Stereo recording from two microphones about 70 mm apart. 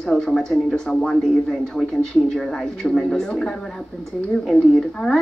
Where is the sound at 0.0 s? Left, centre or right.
Centre.